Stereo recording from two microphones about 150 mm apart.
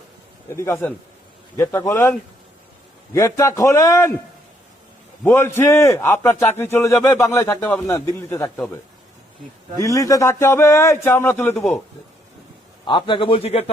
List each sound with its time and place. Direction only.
0.5 s a man's voice: 15° left (ahead or behind)
5.2 s a man's voice: 15° left (ahead or behind)
9.7 s a man's voice: 20° left (ahead or behind)
12.8 s a man's voice: 30° left (ahead or behind)